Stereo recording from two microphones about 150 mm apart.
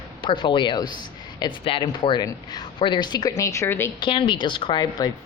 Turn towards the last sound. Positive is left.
turn(degrees=30)  # may be behind; listen again after turning